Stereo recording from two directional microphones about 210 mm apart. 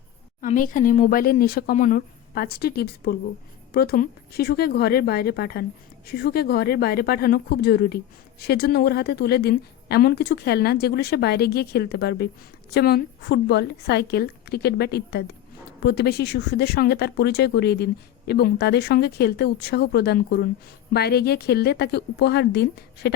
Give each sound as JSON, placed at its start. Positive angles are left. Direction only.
{"t": 0.4, "sound": "speech", "side_deg": 40}